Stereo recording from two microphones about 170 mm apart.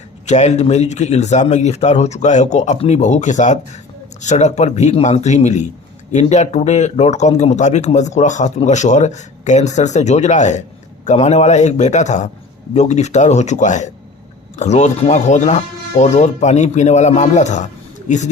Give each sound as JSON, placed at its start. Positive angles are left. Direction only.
{"t": 0.3, "sound": "a man's voice", "side_deg": 40}